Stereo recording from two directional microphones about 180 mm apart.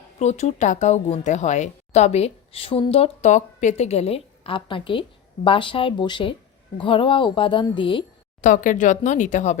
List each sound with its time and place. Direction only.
0.2 s a woman's voice: 40° left (ahead or behind)
8.4 s speech: 45° left (ahead or behind)